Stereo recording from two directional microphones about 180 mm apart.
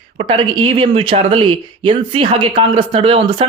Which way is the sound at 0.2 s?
30° right (ahead or behind).